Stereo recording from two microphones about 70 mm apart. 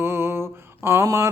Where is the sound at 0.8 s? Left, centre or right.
Right.